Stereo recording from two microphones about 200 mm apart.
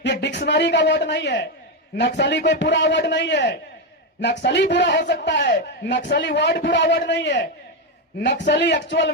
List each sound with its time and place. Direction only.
0.0 s a man's voice: 60° left (ahead or behind)
8.4 s a man's voice: 60° left (ahead or behind)